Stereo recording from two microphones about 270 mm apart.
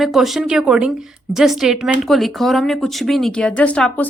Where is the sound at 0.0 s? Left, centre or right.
Centre.